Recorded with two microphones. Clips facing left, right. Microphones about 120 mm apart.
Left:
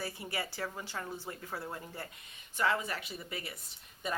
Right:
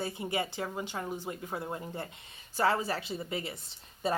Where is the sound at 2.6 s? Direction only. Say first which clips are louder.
Right 4 dB; 30° right (ahead or behind).